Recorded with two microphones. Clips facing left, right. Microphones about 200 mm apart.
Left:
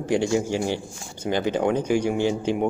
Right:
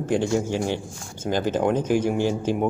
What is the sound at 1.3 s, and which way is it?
Speech, 60° left (ahead or behind).